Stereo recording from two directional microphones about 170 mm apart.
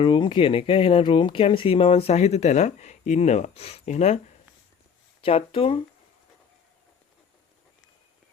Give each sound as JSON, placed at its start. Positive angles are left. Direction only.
{"t": 0.0, "sound": "speech", "side_deg": 30}
{"t": 5.2, "sound": "speech", "side_deg": 35}